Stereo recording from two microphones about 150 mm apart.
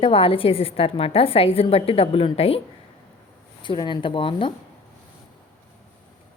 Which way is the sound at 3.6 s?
30° left (ahead or behind).